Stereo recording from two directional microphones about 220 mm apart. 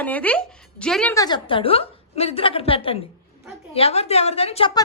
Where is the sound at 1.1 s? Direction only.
20° left (ahead or behind).